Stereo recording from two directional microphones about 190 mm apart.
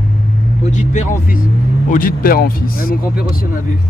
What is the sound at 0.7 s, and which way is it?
Speech, 40° left (ahead or behind).